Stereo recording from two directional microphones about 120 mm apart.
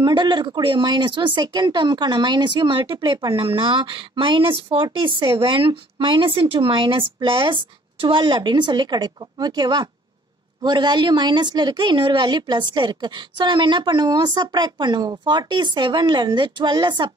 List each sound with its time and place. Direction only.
0.0 s a woman's voice: 40° right (ahead or behind)
4.8 s a woman's voice: 30° right (ahead or behind)
5.3 s a woman's voice: 45° right (ahead or behind)